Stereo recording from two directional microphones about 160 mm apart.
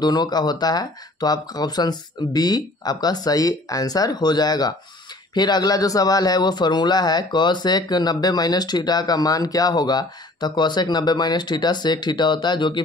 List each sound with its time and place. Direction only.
0.0 s speech: 25° left (ahead or behind)